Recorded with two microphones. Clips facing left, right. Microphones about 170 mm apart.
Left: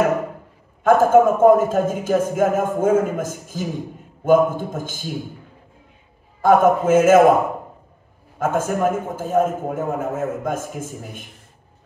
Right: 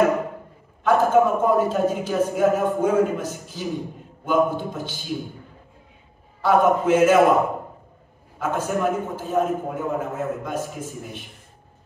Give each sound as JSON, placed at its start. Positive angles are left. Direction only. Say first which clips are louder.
{"t": 0.8, "sound": "a man's voice", "louder": "left 4 dB", "side_deg": 45}
{"t": 6.4, "sound": "a man's voice", "louder": "left 3 dB", "side_deg": 50}
{"t": 8.4, "sound": "a man's voice", "louder": "left 3 dB", "side_deg": 50}